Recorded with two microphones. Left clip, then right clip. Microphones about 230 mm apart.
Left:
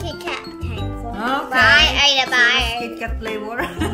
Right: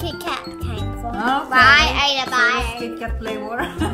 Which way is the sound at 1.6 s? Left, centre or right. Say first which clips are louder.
Even; right.